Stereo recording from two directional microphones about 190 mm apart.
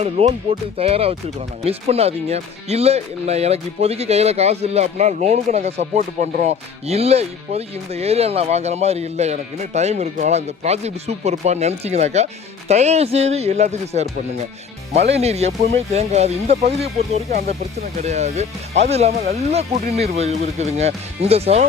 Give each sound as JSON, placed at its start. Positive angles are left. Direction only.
{"t": 0.0, "sound": "speech", "side_deg": -30}
{"t": 15.1, "sound": "speech", "side_deg": -35}